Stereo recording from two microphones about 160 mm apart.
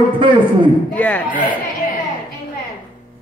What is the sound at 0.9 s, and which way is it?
Speech, 10° left (ahead or behind).